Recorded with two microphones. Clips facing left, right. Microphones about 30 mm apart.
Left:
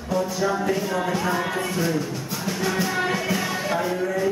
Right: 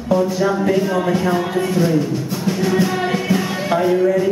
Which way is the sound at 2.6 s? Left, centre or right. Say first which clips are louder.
Right 5 dB; centre.